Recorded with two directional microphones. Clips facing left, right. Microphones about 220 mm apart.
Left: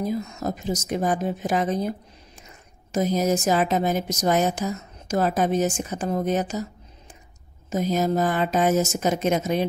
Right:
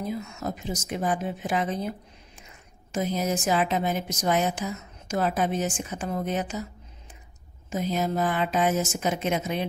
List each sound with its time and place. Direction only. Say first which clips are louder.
0.0 s a woman's voice: left 5 dB; 40° left (ahead or behind)
7.7 s a woman's voice: left 4 dB; 40° left (ahead or behind)